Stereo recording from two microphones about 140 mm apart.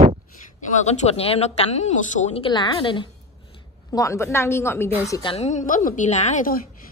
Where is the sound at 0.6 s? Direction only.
55° left (ahead or behind).